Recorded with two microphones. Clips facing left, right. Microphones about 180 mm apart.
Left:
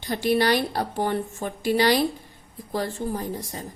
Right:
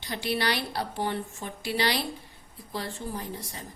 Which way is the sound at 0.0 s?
45° left (ahead or behind).